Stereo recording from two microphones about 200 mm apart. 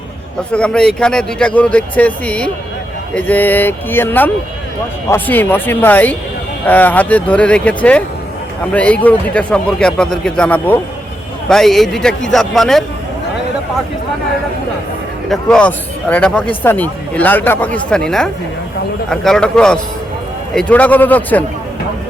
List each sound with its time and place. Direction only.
0.5 s a man's voice: 5° left (ahead or behind)
15.3 s a man's voice: 5° left (ahead or behind)